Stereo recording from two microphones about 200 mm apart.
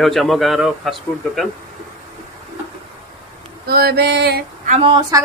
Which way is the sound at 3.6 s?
50° right (ahead or behind).